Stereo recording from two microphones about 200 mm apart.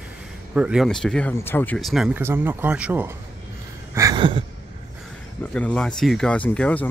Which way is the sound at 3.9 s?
20° right (ahead or behind).